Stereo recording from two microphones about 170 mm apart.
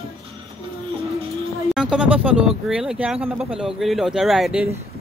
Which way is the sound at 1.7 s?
5° right (ahead or behind).